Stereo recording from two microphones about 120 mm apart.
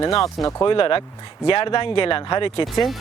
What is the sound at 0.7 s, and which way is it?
Speech, 50° left (ahead or behind).